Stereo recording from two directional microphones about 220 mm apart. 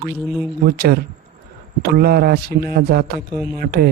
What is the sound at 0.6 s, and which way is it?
Speech, 45° right (ahead or behind).